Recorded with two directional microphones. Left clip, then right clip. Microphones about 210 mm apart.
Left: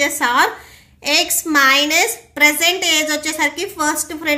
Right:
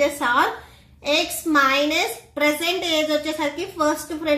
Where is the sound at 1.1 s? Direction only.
50° left (ahead or behind).